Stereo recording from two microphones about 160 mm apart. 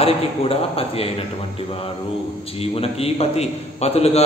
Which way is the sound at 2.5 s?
40° left (ahead or behind).